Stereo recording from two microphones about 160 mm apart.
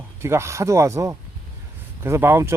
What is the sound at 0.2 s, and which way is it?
Speech, 15° right (ahead or behind).